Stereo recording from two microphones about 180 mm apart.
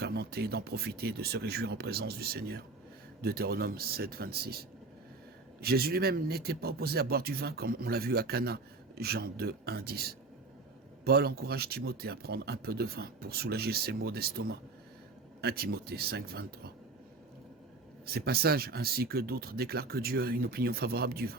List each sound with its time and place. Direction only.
0.0 s speech: 60° right (ahead or behind)
18.0 s speech: 60° right (ahead or behind)